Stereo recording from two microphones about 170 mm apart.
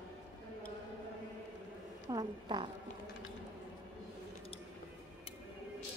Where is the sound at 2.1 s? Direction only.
25° right (ahead or behind).